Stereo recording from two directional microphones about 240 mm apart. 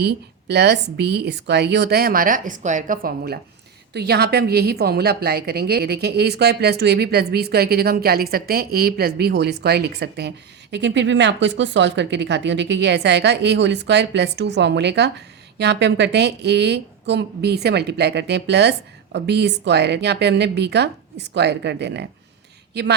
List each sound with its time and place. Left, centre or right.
0.0 s a woman's voice: right